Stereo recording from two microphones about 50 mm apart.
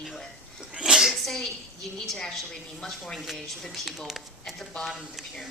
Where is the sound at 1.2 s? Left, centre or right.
Centre.